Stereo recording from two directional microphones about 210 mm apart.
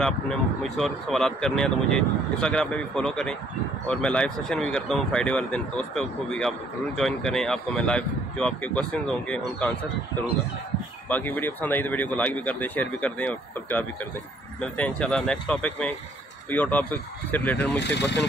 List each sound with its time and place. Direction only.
0.7 s speech: centre (ahead or behind)
11.1 s speech: 10° left (ahead or behind)
17.7 s speech: 55° left (ahead or behind)